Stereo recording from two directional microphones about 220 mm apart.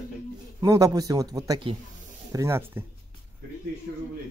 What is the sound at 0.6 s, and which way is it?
A man's voice, 15° right (ahead or behind).